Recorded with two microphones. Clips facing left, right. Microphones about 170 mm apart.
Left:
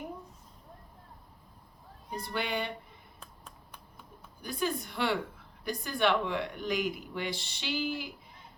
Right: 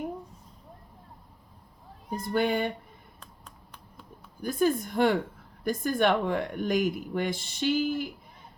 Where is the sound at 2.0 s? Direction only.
45° right (ahead or behind).